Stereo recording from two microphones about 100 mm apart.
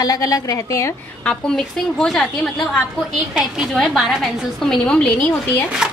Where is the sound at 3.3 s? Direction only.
5° right (ahead or behind).